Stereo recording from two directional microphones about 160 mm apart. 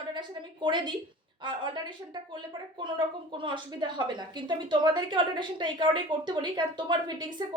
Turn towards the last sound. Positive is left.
turn(degrees=-30)  # may be behind; listen again after turning